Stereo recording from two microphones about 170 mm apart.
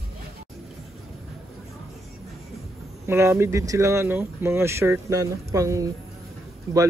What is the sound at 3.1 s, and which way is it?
Speech, 15° right (ahead or behind).